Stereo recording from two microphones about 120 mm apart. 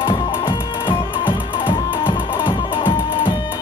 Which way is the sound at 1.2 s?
20° left (ahead or behind).